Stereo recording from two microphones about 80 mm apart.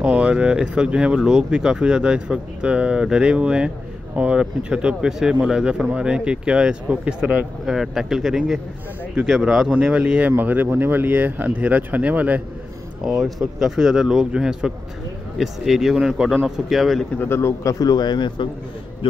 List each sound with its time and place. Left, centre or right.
0.0 s speech: centre
7.6 s speech: centre
13.0 s speech: centre
17.2 s a man's voice: left
17.8 s speech: left